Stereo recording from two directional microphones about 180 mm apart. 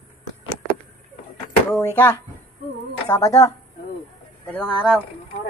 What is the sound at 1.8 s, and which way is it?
Speech, 15° left (ahead or behind).